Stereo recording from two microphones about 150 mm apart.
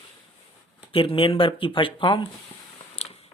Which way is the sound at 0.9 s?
35° left (ahead or behind).